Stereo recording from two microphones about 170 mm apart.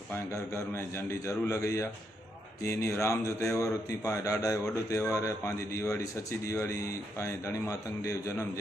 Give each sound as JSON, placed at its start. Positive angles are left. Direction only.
{"t": 0.5, "sound": "a man's voice", "side_deg": 15}